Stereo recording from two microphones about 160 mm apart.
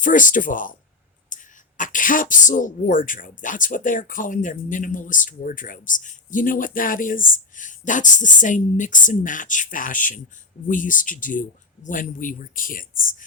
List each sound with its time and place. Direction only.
0.0 s speech: 55° left (ahead or behind)
1.3 s a sound: 55° left (ahead or behind)
1.8 s beatboxing: 55° left (ahead or behind)
2.3 s speech: 55° left (ahead or behind)